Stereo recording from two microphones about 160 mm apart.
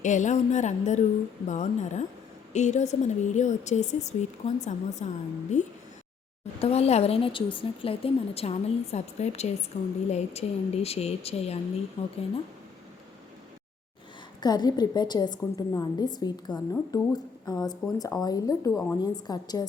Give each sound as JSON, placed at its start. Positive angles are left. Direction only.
{"t": 0.0, "sound": "a woman's voice", "side_deg": 50}
{"t": 14.4, "sound": "a woman's voice", "side_deg": 25}
{"t": 18.7, "sound": "a woman's voice", "side_deg": 10}
{"t": 19.0, "sound": "a woman's voice", "side_deg": 25}